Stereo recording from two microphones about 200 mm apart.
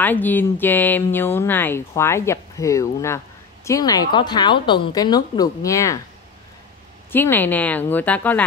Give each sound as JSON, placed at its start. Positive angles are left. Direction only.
{"t": 0.0, "sound": "speech", "side_deg": 10}
{"t": 7.1, "sound": "speech", "side_deg": 10}